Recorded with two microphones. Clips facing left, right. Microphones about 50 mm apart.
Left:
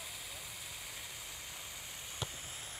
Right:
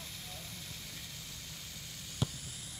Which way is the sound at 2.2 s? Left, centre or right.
Left.